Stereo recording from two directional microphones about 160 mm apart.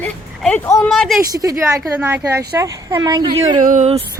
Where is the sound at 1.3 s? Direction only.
20° right (ahead or behind).